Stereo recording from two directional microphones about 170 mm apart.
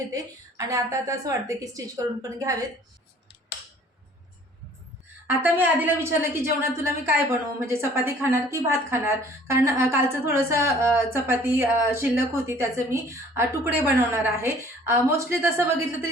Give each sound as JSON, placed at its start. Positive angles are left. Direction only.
{"t": 0.1, "sound": "a woman's voice", "side_deg": -20}
{"t": 5.3, "sound": "a woman's voice", "side_deg": -10}